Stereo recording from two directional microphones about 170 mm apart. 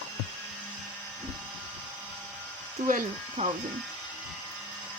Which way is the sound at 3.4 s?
45° right (ahead or behind).